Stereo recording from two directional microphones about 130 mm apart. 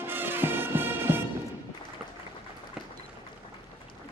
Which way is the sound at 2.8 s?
5° right (ahead or behind).